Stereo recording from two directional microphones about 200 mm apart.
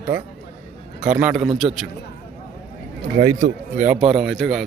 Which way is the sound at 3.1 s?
45° right (ahead or behind).